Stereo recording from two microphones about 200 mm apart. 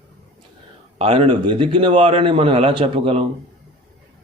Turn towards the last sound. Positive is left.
turn(degrees=-30)  # may be behind; listen again after turning